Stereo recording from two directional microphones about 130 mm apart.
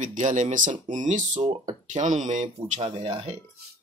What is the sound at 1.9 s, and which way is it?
Speech, 75° right (ahead or behind).